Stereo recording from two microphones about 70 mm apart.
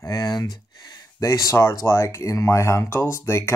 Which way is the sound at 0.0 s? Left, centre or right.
Left.